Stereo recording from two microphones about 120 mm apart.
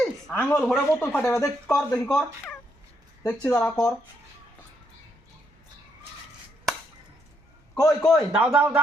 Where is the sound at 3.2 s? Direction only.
5° left (ahead or behind).